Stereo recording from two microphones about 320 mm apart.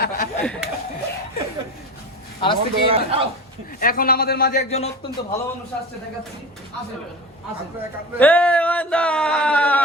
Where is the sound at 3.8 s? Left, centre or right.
Left.